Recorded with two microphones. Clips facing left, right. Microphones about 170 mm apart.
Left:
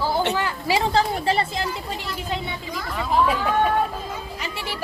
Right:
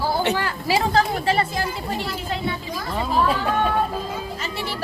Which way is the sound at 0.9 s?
30° left (ahead or behind).